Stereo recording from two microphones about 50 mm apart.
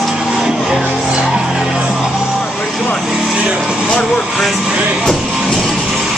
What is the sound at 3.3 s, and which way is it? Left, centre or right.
Vehicle, centre.